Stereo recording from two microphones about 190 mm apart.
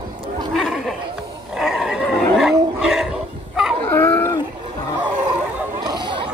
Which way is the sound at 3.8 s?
10° left (ahead or behind).